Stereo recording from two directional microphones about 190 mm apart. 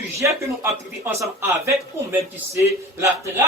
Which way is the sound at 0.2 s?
15° right (ahead or behind).